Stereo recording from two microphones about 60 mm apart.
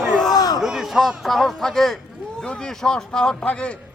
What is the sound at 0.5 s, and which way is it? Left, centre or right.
A man's voice, centre.